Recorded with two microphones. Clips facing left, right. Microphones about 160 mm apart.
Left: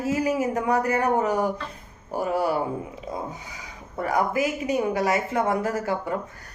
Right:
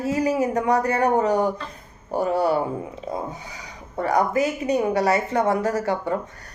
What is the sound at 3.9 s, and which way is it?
Speech, 30° right (ahead or behind).